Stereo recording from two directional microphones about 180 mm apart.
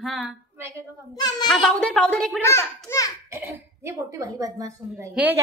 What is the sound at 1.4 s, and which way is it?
Speech, centre (ahead or behind).